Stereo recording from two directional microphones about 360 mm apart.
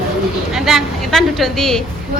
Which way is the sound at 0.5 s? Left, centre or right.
Centre.